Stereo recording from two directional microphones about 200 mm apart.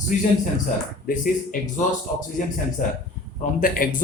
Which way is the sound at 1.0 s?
45° left (ahead or behind).